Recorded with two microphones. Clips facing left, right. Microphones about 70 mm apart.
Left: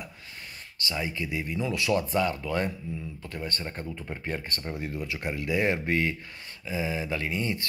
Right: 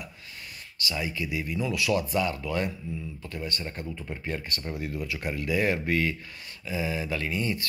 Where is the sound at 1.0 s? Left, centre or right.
Left.